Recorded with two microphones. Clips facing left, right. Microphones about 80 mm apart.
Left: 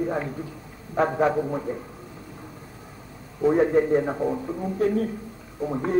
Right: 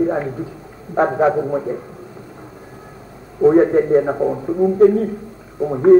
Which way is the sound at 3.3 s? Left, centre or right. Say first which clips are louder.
Right 7 dB; right.